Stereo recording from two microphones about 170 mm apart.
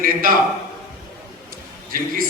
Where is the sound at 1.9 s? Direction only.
55° right (ahead or behind).